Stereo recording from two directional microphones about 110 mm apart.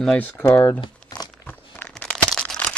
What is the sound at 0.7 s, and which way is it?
Crumpling, 40° left (ahead or behind).